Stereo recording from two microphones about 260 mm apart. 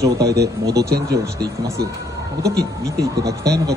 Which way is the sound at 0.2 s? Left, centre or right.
Right.